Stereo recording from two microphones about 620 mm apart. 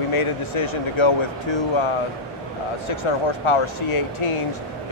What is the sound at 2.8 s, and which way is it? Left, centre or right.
Speech, left.